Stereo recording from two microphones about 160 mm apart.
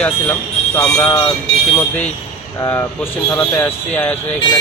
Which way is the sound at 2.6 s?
15° left (ahead or behind).